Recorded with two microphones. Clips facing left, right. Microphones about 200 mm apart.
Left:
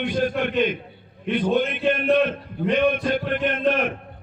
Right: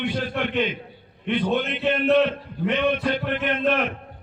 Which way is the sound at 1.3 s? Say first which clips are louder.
Left 2 dB; 50° left (ahead or behind).